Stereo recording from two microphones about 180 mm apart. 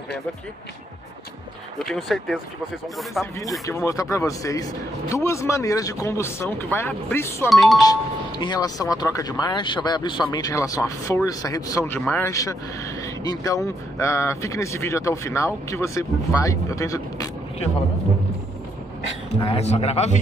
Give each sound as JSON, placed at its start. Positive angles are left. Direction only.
{"t": 1.8, "sound": "speech", "side_deg": 0}
{"t": 3.6, "sound": "speech", "side_deg": 15}
{"t": 7.8, "sound": "speech", "side_deg": 20}
{"t": 19.4, "sound": "a man's voice", "side_deg": 35}